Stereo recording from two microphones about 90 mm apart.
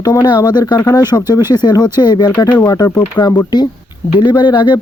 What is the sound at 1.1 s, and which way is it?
Speech, 30° left (ahead or behind).